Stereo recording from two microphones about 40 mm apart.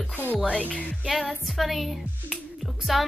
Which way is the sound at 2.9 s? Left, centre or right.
Centre.